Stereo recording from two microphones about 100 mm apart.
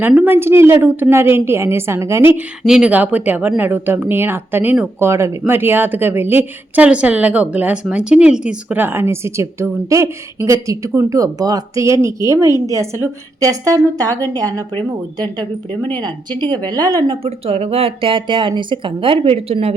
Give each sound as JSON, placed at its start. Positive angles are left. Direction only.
{"t": 0.3, "sound": "a woman's voice", "side_deg": -25}
{"t": 2.6, "sound": "a woman's voice", "side_deg": -10}
{"t": 17.2, "sound": "speech", "side_deg": -80}